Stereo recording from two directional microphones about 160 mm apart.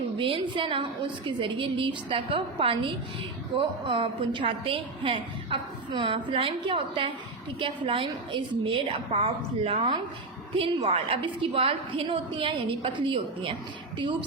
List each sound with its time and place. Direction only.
0.2 s a woman's voice: 35° right (ahead or behind)